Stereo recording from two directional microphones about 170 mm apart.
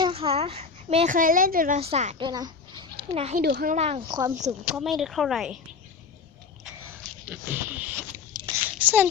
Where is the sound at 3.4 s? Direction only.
60° right (ahead or behind).